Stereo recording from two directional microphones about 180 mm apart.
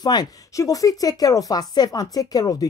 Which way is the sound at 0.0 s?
20° left (ahead or behind).